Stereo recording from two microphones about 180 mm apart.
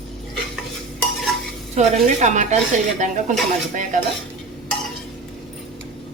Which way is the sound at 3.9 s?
45° right (ahead or behind).